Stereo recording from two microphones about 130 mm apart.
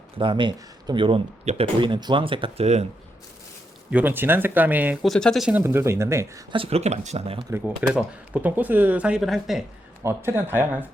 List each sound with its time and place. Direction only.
0.2 s speech: 40° right (ahead or behind)
1.5 s speech: 55° right (ahead or behind)
1.8 s speech: 35° right (ahead or behind)
3.9 s speech: 15° right (ahead or behind)
5.0 s speech: 5° left (ahead or behind)
5.5 s speech: 15° right (ahead or behind)
6.5 s speech: 50° right (ahead or behind)
7.8 s speech: 10° right (ahead or behind)
10.0 s speech: 20° right (ahead or behind)